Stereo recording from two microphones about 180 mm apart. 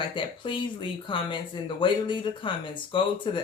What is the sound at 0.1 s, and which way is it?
Speech, 25° left (ahead or behind).